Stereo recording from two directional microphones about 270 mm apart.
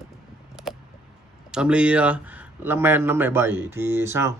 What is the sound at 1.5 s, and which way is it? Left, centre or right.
Speech, centre.